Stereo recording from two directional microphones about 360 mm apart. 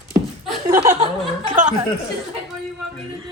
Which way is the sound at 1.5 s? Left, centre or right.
Right.